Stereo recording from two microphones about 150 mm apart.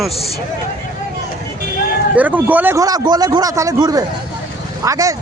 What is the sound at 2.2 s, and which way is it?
A man's voice, 10° right (ahead or behind).